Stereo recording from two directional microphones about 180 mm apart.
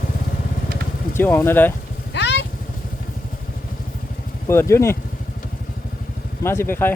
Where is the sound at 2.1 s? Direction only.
70° left (ahead or behind).